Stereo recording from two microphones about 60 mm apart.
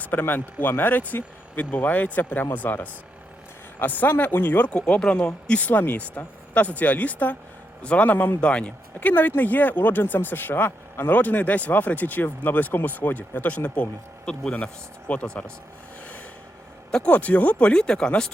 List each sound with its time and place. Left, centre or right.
0.0 s speech: left
4.7 s speech: centre
8.1 s speech: left
8.4 s speech: centre
14.3 s speech: centre
16.9 s speech: left